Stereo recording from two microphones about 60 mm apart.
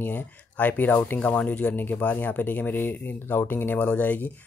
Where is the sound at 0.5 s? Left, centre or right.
Left.